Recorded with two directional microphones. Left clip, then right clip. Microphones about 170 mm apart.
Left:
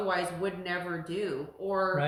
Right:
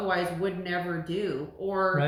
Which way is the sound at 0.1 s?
20° left (ahead or behind).